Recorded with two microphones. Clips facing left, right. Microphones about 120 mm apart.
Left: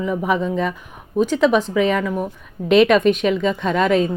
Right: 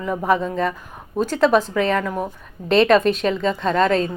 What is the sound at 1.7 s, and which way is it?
A woman's voice, 5° left (ahead or behind).